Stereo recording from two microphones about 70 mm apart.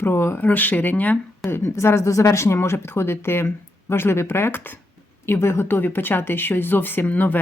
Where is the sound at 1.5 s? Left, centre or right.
Left.